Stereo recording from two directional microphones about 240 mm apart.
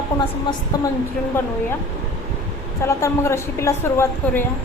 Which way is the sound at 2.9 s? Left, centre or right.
Centre.